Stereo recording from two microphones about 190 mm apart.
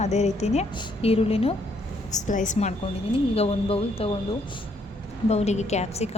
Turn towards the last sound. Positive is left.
turn(degrees=35)  # may be behind; listen again after turning